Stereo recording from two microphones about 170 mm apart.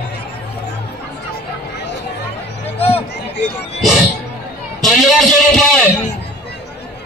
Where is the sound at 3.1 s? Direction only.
90° left.